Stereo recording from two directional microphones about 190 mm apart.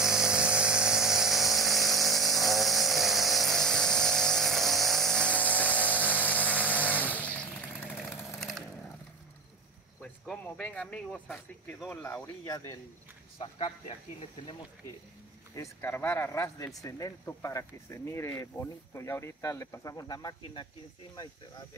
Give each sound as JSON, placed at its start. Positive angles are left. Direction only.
{"t": 0.0, "sound": "a sound", "side_deg": -5}
{"t": 2.3, "sound": "vehicle", "side_deg": 0}
{"t": 10.2, "sound": "speech", "side_deg": 5}
{"t": 15.5, "sound": "speech", "side_deg": 15}